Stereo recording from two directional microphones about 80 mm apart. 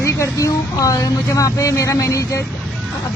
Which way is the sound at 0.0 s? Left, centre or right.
Left.